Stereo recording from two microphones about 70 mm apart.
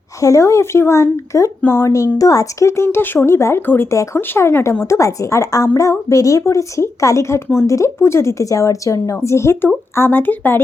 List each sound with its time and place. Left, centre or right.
0.2 s speech: left
2.1 s speech: left